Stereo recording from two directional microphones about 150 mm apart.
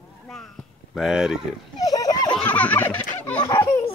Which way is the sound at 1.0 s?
5° right (ahead or behind).